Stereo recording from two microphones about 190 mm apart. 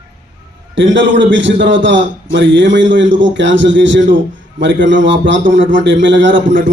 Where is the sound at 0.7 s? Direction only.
75° right (ahead or behind).